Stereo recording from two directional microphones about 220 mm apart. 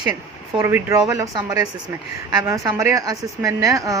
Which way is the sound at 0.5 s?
15° right (ahead or behind).